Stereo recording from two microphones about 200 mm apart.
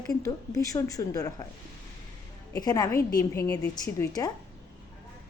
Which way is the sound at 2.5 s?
20° left (ahead or behind).